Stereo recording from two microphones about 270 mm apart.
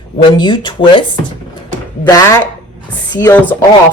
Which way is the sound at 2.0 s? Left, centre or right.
Centre.